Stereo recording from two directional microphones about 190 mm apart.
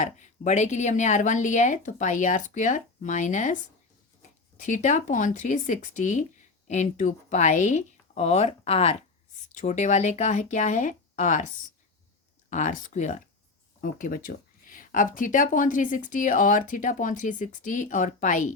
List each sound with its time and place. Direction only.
0.0 s speech: 40° left (ahead or behind)